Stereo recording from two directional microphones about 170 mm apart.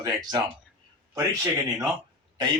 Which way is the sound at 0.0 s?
25° right (ahead or behind).